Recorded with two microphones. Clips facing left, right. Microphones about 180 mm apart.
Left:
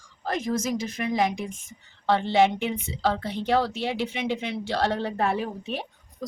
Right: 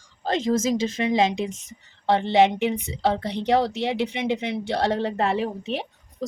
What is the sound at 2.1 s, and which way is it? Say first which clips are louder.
A woman's voice: right 2 dB; 20° right (ahead or behind).